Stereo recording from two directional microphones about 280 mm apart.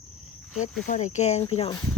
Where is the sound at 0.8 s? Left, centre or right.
Left.